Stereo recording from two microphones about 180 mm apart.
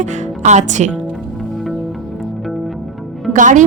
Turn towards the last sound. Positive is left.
turn(degrees=-45)  # may be behind; listen again after turning